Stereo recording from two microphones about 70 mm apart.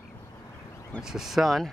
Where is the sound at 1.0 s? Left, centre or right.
Centre.